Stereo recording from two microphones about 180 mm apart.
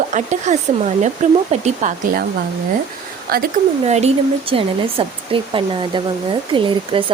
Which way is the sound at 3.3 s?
55° right (ahead or behind).